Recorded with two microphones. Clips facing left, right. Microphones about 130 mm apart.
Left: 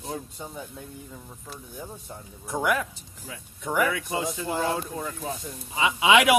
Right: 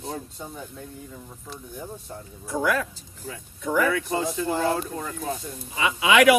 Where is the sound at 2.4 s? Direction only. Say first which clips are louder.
Right 1 dB; 20° left (ahead or behind).